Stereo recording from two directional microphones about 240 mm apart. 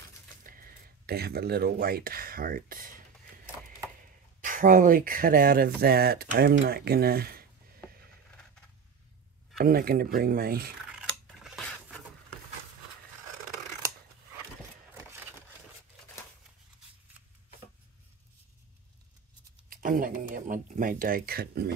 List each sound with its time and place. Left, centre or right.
0.4 s speech: right
4.4 s speech: right
9.6 s speech: right
10.9 s scissors: centre
19.7 s a sound: right